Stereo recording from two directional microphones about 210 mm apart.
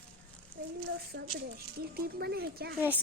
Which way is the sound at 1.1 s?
60° right (ahead or behind).